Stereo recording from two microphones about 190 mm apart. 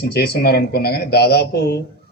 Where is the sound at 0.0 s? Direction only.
55° left (ahead or behind).